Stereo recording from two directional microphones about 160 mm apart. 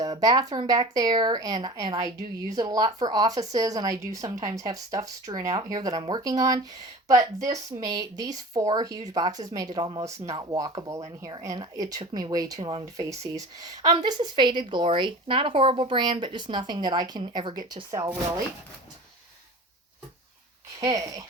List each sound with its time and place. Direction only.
0.0 s speech: 25° right (ahead or behind)
20.8 s speech: 20° right (ahead or behind)